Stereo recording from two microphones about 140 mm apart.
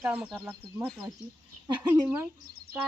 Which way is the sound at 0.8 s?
5° right (ahead or behind).